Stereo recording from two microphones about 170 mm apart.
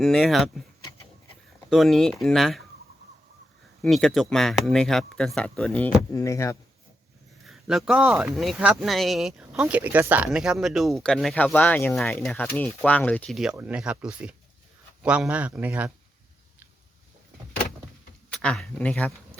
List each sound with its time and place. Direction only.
0.0 s speech: centre (ahead or behind)
1.7 s speech: centre (ahead or behind)
3.8 s speech: centre (ahead or behind)
6.1 s speech: 15° left (ahead or behind)
7.4 s speech: centre (ahead or behind)
18.3 s speech: 5° left (ahead or behind)